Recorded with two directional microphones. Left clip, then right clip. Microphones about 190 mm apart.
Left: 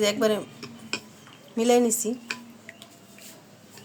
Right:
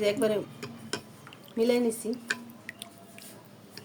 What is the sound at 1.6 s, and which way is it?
Speech, 40° left (ahead or behind).